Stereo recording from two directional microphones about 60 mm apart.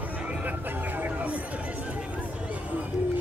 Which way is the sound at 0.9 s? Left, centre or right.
Right.